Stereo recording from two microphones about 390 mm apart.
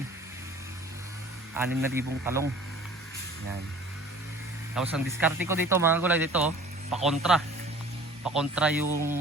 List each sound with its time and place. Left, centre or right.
1.5 s speech: centre
4.7 s speech: centre